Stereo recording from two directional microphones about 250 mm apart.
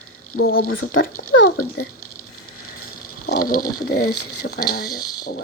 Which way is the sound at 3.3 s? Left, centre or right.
Left.